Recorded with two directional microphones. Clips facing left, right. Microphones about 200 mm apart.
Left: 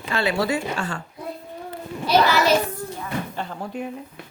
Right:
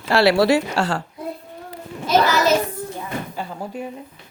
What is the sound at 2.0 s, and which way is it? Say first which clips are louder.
Children playing: right 1 dB; 40° right (ahead or behind).